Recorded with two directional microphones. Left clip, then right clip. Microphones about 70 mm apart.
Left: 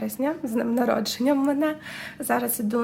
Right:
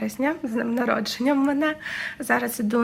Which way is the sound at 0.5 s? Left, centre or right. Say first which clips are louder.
Even; left.